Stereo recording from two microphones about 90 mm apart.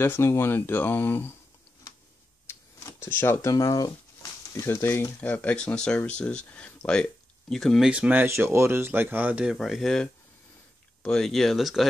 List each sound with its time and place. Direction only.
0.0 s speech: 25° left (ahead or behind)
3.0 s speech: 25° left (ahead or behind)
3.4 s speech: 40° left (ahead or behind)
5.2 s speech: 15° left (ahead or behind)
7.9 s speech: 15° right (ahead or behind)
8.3 s speech: 30° right (ahead or behind); by 11.9 s centre (ahead or behind)